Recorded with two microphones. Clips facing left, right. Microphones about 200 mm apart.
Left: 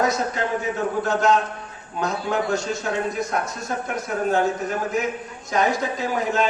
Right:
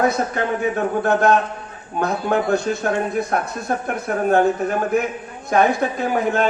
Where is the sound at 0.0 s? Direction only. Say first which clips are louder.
Right 3 dB; 60° right (ahead or behind).